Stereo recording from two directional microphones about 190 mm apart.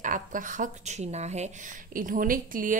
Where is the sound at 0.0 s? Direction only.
45° right (ahead or behind).